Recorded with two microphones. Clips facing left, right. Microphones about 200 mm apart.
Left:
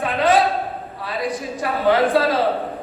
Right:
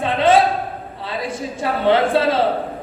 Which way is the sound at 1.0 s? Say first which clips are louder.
Left 1 dB; 25° right (ahead or behind).